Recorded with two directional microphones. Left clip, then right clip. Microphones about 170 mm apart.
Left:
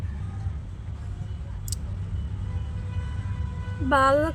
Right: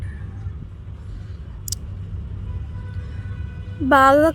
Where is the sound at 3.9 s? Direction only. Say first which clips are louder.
Right 7 dB; 45° right (ahead or behind).